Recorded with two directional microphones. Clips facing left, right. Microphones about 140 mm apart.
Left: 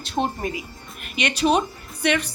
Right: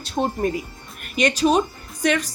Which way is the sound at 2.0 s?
40° right (ahead or behind).